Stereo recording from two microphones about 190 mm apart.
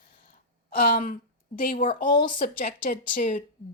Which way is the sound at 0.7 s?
50° left (ahead or behind).